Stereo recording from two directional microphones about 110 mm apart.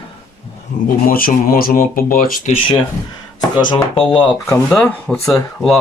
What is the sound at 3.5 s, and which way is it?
Speech, 45° left (ahead or behind).